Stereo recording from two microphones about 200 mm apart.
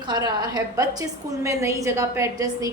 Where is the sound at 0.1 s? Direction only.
15° right (ahead or behind).